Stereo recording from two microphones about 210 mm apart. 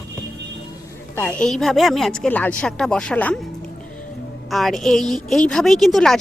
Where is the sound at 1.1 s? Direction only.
10° left (ahead or behind).